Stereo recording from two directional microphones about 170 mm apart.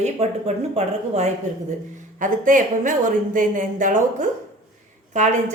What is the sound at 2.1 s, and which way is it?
A woman's voice, 50° right (ahead or behind).